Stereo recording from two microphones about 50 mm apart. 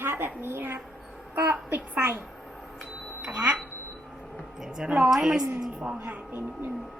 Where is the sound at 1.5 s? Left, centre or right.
Right.